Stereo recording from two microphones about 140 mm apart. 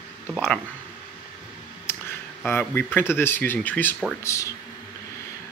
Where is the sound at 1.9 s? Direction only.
15° left (ahead or behind).